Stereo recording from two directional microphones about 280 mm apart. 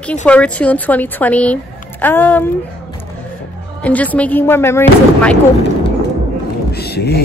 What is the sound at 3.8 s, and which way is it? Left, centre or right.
Speech, centre.